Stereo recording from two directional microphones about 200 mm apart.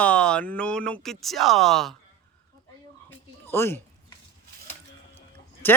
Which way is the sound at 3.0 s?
10° left (ahead or behind).